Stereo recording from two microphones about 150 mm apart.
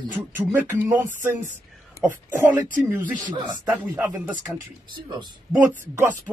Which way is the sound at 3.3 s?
25° right (ahead or behind).